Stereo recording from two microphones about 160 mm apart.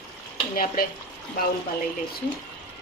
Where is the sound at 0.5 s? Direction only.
65° left (ahead or behind).